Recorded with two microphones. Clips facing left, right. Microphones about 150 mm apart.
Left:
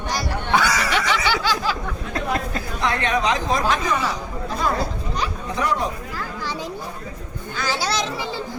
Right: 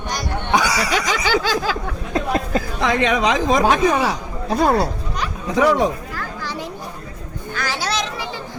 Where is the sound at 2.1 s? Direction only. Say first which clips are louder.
Right 5 dB; 25° right (ahead or behind).